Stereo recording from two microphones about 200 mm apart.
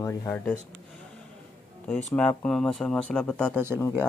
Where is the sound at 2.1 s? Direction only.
5° left (ahead or behind).